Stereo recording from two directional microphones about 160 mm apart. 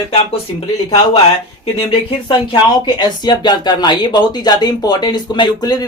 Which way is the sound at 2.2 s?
30° left (ahead or behind).